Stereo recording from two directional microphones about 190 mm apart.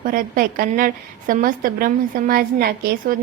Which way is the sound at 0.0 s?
45° right (ahead or behind).